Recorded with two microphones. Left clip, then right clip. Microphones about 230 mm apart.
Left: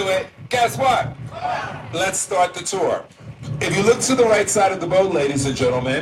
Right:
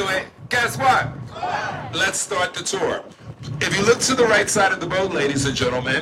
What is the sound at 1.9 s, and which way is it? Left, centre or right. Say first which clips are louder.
A man's voice: left 2 dB; left.